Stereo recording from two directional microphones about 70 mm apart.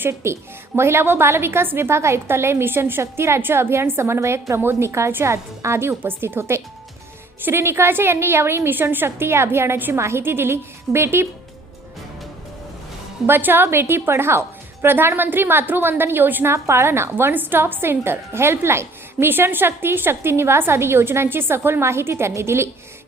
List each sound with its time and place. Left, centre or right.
0.0 s a woman's voice: right
13.2 s a woman's voice: right